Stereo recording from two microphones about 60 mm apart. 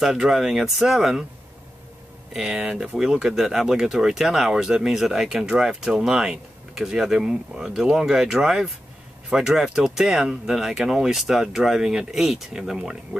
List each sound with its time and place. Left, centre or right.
0.0 s speech: centre
2.3 s speech: centre